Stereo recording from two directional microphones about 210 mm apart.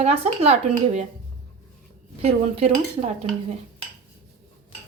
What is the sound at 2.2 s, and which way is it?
Speech, 30° right (ahead or behind).